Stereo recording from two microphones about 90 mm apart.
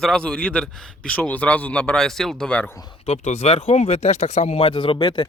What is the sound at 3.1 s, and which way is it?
Speech, 90° left.